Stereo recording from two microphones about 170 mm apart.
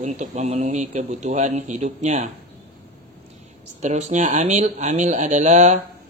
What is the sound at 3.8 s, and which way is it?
Speech, 40° right (ahead or behind).